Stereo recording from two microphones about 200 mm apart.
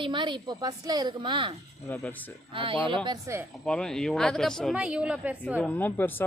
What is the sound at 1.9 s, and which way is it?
Speech, 10° left (ahead or behind).